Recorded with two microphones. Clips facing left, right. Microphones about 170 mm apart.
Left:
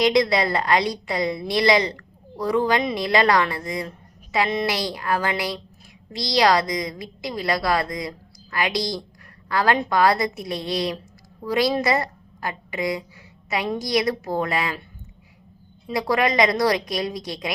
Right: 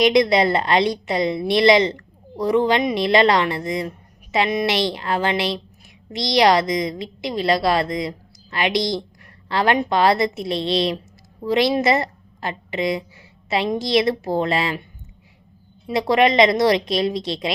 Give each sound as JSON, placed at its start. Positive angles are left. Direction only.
{"t": 0.0, "sound": "a woman's voice", "side_deg": -20}
{"t": 15.9, "sound": "a woman's voice", "side_deg": -25}